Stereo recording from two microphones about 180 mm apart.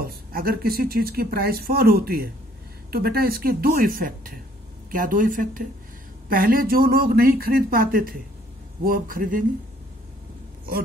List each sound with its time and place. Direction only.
0.0 s speech: 55° right (ahead or behind)